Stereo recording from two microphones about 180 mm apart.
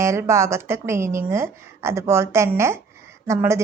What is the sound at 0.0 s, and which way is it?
A woman's voice, 15° right (ahead or behind).